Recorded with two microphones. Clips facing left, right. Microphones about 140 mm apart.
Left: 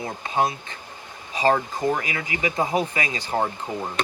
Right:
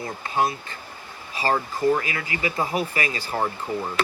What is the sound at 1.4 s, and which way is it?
Speech, 20° left (ahead or behind).